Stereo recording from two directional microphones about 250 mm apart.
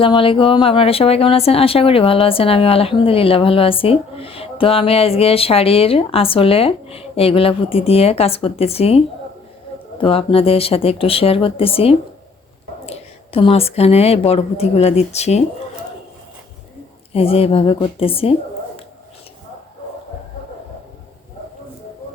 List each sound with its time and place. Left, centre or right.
0.0 s speech: left
17.1 s speech: left